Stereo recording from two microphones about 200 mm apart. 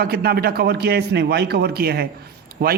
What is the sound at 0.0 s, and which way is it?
A man's voice, 50° right (ahead or behind).